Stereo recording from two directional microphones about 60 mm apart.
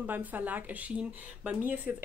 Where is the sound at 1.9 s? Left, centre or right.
Centre.